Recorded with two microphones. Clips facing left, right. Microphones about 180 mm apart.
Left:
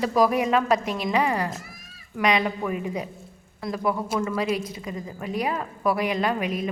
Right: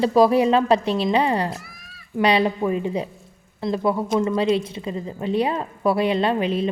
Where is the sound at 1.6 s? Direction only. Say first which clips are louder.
Even; 40° left (ahead or behind).